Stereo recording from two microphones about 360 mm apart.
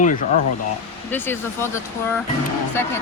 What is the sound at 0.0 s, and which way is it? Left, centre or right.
Speech, left.